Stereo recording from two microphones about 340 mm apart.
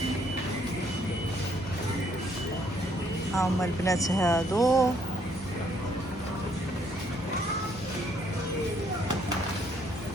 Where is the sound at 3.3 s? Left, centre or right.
Centre.